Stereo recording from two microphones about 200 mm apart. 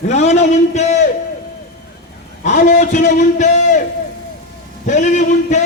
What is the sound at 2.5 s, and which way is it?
A man's voice, 40° left (ahead or behind).